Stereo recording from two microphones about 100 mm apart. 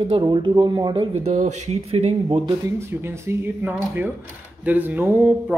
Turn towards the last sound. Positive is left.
turn(degrees=-20)  # may be behind; listen again after turning